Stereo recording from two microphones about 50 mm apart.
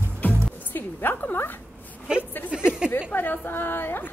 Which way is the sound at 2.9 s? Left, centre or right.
Left.